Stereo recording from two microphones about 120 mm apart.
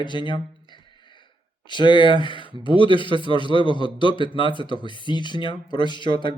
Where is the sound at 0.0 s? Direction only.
40° left (ahead or behind).